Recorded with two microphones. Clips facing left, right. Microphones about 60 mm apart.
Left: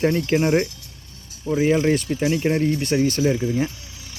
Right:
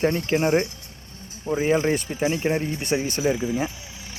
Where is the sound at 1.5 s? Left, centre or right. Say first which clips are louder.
Left 3 dB; right.